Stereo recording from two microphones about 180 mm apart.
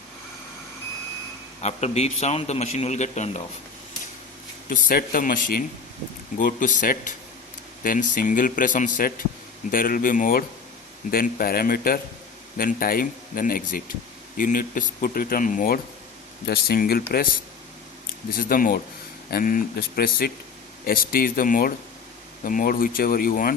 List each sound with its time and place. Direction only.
1.6 s a man's voice: 35° left (ahead or behind)
4.7 s speech: 50° left (ahead or behind)
18.3 s speech: 50° left (ahead or behind)